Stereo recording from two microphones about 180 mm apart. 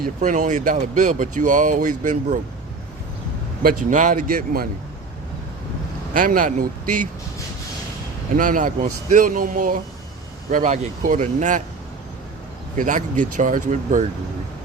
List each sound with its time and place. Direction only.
0.0 s speech: 45° right (ahead or behind)
3.6 s speech: 50° right (ahead or behind)
6.1 s speech: 50° right (ahead or behind)
8.4 s speech: 45° right (ahead or behind)
12.7 s speech: 45° right (ahead or behind)